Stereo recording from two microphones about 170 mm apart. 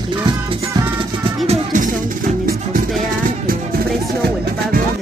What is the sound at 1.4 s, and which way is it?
Music, 45° right (ahead or behind).